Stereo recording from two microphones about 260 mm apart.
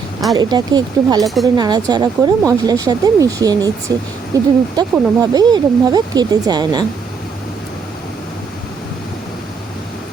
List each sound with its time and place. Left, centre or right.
0.3 s speech: centre
1.2 s speech: centre
1.5 s speech: centre